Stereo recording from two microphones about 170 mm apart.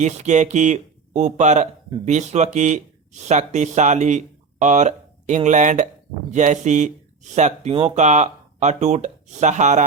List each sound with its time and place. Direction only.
0.0 s speech: 45° right (ahead or behind)